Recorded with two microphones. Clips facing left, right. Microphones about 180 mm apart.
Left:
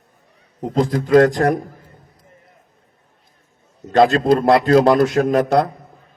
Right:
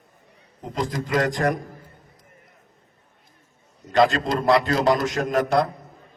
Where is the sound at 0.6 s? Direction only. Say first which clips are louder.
Left 9 dB; 45° left (ahead or behind).